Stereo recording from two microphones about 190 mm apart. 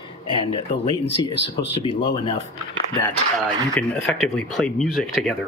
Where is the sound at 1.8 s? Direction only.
25° left (ahead or behind).